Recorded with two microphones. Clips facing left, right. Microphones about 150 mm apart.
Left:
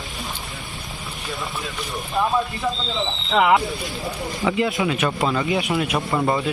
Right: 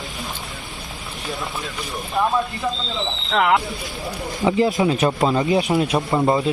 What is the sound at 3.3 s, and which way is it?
Speech, 5° left (ahead or behind).